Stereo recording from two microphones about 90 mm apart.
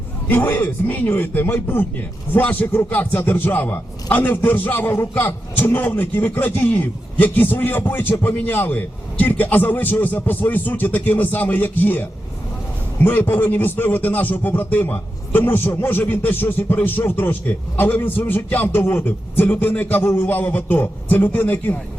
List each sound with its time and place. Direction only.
0.3 s a man's voice: 20° left (ahead or behind)